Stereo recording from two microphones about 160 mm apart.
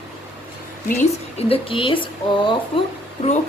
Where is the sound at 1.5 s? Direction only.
35° left (ahead or behind).